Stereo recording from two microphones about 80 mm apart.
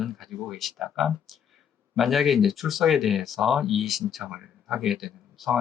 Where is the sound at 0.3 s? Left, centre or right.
Centre.